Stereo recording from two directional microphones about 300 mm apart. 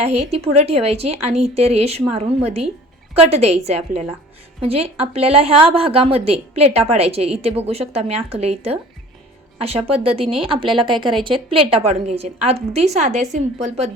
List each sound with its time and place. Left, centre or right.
0.0 s a woman's voice: right